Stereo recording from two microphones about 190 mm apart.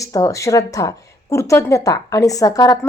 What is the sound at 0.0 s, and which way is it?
A woman's voice, 15° left (ahead or behind).